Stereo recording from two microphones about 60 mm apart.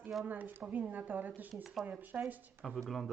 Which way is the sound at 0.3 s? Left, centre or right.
Right.